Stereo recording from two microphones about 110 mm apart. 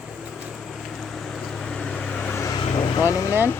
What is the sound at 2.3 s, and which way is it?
Vehicle, 30° left (ahead or behind).